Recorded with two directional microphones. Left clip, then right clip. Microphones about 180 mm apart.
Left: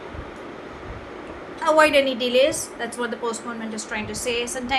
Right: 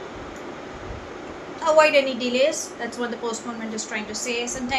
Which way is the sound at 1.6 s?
35° left (ahead or behind).